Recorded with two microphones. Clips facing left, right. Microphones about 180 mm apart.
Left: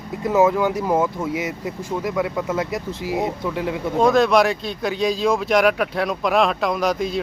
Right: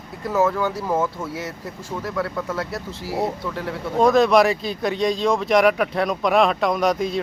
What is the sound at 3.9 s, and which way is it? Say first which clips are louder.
Speech: right 1 dB; centre (ahead or behind).